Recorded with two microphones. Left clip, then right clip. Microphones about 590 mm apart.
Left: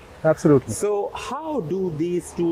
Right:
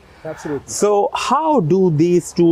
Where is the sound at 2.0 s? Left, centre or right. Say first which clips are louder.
Right 10 dB; right.